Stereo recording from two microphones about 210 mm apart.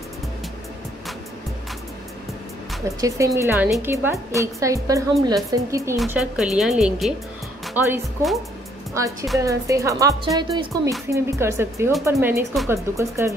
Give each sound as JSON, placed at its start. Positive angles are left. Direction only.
{"t": 3.0, "sound": "a woman's voice", "side_deg": -15}
{"t": 6.0, "sound": "a woman's voice", "side_deg": 0}